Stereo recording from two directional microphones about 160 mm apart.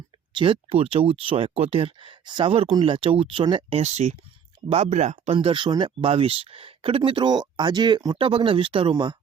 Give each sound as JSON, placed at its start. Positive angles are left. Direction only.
{"t": 0.3, "sound": "speech", "side_deg": -30}